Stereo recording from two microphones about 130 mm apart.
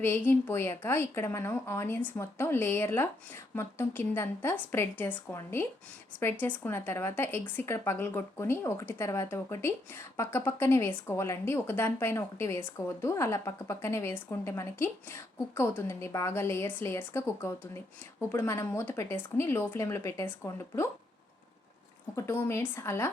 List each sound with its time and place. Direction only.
0.0 s a woman's voice: 15° left (ahead or behind)
22.1 s speech: 20° left (ahead or behind)